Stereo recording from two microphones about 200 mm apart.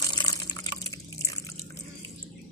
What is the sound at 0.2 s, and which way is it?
Water, 20° left (ahead or behind).